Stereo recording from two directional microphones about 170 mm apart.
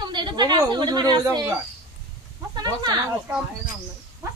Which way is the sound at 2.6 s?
25° right (ahead or behind).